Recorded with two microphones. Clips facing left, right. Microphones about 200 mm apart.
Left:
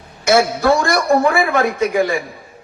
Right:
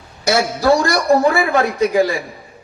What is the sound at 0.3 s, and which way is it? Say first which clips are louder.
A man's voice: left 1 dB; 35° right (ahead or behind).